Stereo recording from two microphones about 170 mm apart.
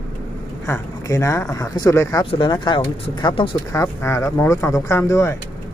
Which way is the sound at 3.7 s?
15° left (ahead or behind).